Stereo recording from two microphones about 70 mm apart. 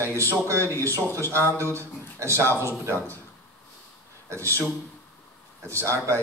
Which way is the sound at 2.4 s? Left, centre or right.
Left.